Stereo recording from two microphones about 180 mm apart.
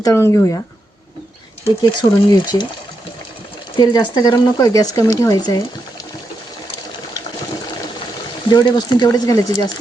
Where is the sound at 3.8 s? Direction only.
20° left (ahead or behind).